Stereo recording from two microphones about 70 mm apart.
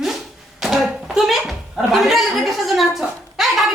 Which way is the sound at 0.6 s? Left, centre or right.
Centre.